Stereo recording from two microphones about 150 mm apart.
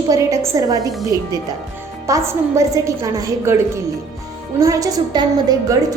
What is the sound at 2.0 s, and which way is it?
A woman's voice, 20° right (ahead or behind).